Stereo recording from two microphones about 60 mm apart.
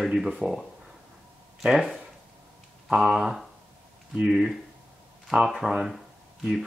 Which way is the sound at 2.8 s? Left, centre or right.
Centre.